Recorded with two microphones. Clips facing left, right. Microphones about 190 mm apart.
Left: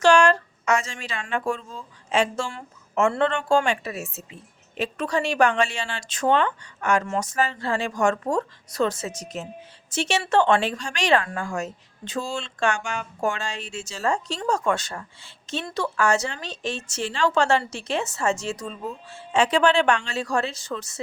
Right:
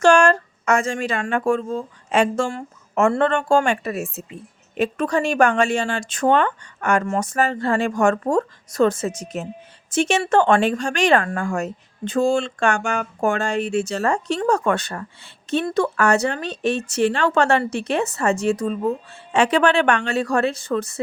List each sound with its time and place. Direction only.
0.0 s speech: 50° right (ahead or behind)